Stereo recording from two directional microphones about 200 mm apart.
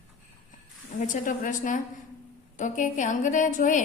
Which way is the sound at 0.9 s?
40° left (ahead or behind).